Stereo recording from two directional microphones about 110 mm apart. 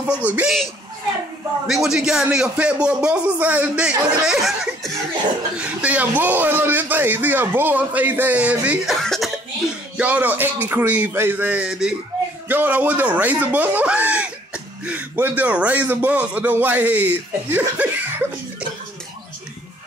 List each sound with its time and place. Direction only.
0.0 s speech: 10° right (ahead or behind)
1.7 s speech: 5° right (ahead or behind)
5.6 s speech: 10° right (ahead or behind)
9.0 s speech: 5° left (ahead or behind)
9.9 s speech: 15° right (ahead or behind)